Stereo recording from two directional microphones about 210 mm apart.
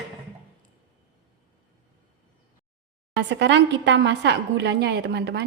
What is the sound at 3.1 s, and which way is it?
A woman's voice, 55° right (ahead or behind).